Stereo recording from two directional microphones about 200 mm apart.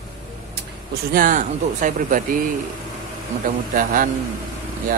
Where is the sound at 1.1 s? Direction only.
40° right (ahead or behind).